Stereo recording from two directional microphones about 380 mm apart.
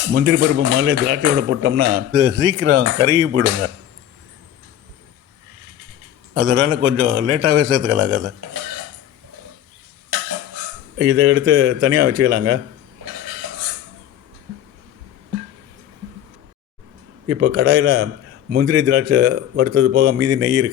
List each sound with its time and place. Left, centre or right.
0.1 s a man's voice: right
6.3 s a man's voice: right
10.9 s a man's voice: right
17.2 s a man's voice: right